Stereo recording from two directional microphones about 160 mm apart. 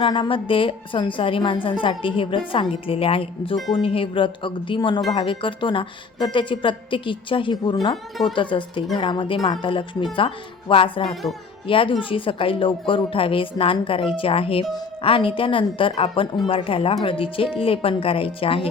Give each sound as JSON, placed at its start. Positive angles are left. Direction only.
{"t": 0.0, "sound": "a woman's voice", "side_deg": 30}
{"t": 11.1, "sound": "speech", "side_deg": 0}
{"t": 11.7, "sound": "a woman's voice", "side_deg": 35}